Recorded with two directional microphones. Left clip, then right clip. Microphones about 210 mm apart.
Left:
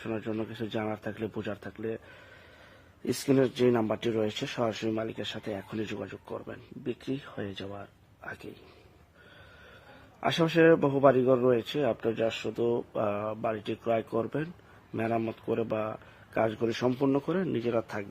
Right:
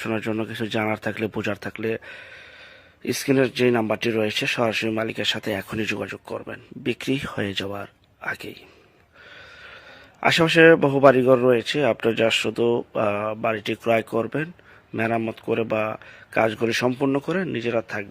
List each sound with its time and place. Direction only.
0.0 s speech: 20° right (ahead or behind)
3.0 s a man's voice: 10° right (ahead or behind)
10.2 s a man's voice: 10° right (ahead or behind)